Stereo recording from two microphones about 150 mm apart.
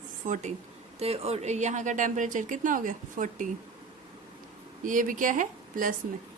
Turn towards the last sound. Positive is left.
turn(degrees=-60)  # may be behind; listen again after turning